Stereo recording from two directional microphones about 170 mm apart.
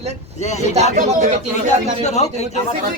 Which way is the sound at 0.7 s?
40° right (ahead or behind).